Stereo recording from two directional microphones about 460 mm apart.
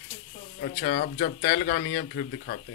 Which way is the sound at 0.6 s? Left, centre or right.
Left.